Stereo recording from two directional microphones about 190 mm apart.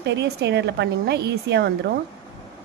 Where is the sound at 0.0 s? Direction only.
65° right (ahead or behind).